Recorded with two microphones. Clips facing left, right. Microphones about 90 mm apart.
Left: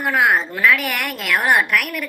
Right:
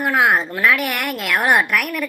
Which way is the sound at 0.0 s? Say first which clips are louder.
Right 1 dB; centre (ahead or behind).